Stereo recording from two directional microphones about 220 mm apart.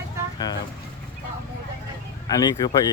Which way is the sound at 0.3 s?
20° left (ahead or behind).